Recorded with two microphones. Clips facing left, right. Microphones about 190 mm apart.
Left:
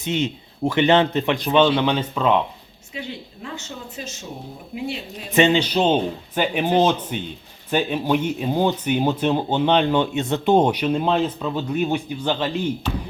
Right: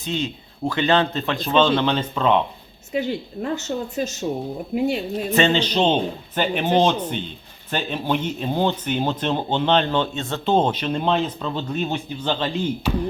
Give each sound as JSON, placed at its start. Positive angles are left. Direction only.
{"t": 0.0, "sound": "speech", "side_deg": 20}
{"t": 3.4, "sound": "speech", "side_deg": -45}
{"t": 5.3, "sound": "speech", "side_deg": 15}